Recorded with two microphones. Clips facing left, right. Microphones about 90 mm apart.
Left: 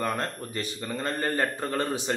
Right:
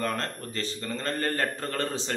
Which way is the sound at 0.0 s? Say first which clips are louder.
Left 1 dB; 15° left (ahead or behind).